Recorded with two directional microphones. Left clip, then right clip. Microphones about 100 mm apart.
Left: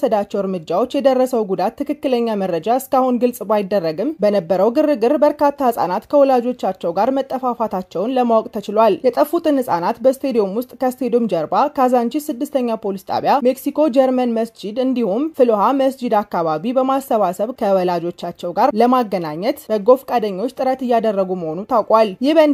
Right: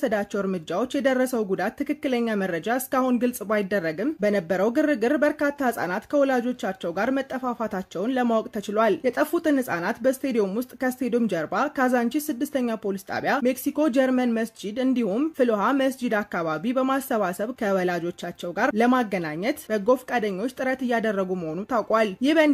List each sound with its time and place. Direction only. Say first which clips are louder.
0.0 s speech: left 8 dB; 20° left (ahead or behind)